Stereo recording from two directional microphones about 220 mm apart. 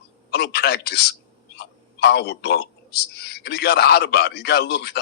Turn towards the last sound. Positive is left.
turn(degrees=45)  # may be behind; listen again after turning